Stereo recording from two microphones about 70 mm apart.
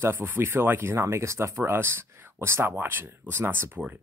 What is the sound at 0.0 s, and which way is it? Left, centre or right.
Speech, right.